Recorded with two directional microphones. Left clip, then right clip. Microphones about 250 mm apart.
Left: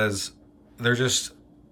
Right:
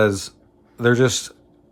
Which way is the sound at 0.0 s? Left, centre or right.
Centre.